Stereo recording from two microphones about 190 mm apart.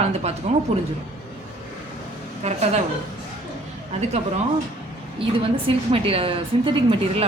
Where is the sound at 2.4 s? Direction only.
35° right (ahead or behind).